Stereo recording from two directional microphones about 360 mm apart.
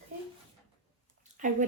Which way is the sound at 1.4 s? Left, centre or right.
Right.